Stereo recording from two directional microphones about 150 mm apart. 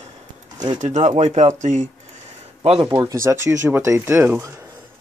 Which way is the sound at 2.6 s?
40° right (ahead or behind).